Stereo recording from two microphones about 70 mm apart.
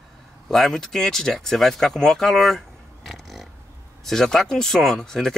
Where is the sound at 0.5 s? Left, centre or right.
Centre.